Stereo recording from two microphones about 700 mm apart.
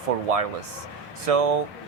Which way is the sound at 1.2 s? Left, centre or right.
Right.